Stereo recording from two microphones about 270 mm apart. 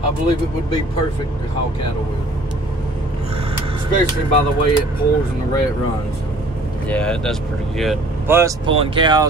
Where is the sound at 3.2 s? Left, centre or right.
Right.